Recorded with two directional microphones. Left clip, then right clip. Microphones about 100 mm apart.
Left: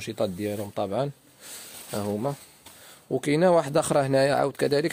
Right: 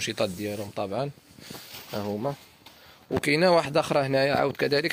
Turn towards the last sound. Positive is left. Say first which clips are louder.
# left 1 dB
turn(degrees=45)  # may be behind; listen again after turning